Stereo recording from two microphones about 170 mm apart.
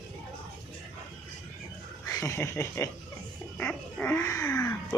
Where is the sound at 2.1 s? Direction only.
20° left (ahead or behind).